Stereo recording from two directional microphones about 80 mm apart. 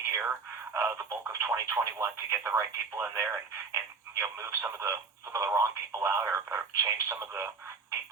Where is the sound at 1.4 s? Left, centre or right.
Right.